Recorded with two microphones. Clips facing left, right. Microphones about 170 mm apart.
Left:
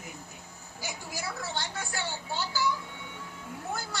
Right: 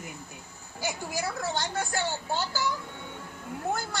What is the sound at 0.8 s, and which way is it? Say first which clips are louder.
A man's voice: right 6 dB; 50° right (ahead or behind).